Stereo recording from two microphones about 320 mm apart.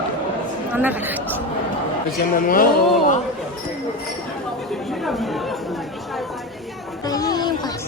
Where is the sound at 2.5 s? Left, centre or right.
Left.